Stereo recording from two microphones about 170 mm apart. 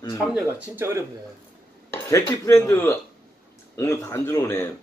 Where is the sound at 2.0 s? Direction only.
20° left (ahead or behind).